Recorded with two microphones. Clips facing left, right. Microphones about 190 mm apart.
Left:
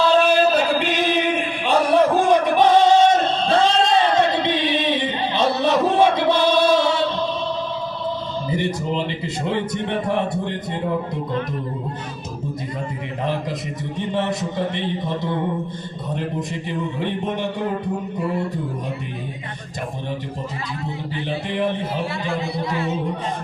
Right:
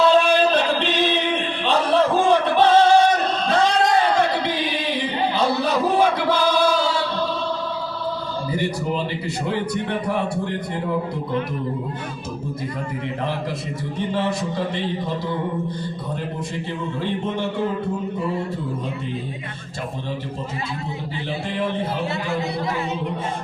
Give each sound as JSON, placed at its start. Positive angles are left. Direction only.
{"t": 0.1, "sound": "a sound", "side_deg": 5}
{"t": 8.4, "sound": "music", "side_deg": 20}
{"t": 9.5, "sound": "a man's voice", "side_deg": 20}
{"t": 14.3, "sound": "a man's voice", "side_deg": 20}